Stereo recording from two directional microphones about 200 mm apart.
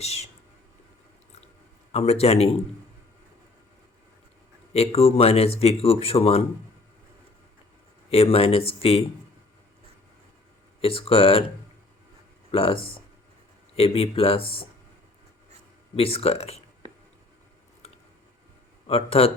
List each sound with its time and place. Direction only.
0.0 s speech: 30° left (ahead or behind)
1.9 s speech: 30° left (ahead or behind)
4.7 s speech: 30° left (ahead or behind)
8.1 s speech: 30° left (ahead or behind)
10.8 s speech: 25° left (ahead or behind)
12.5 s speech: 30° left (ahead or behind)
16.0 s speech: 30° left (ahead or behind)
18.9 s speech: 30° left (ahead or behind)